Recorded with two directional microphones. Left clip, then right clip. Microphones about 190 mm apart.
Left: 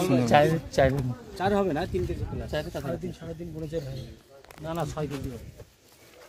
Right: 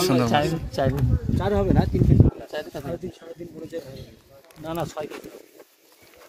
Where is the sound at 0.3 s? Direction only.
25° left (ahead or behind).